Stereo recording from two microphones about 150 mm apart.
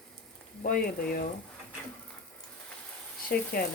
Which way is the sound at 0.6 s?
70° left (ahead or behind).